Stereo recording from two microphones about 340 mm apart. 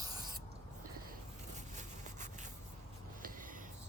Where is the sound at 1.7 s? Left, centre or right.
Right.